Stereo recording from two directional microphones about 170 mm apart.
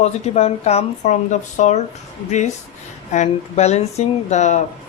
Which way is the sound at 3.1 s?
40° left (ahead or behind).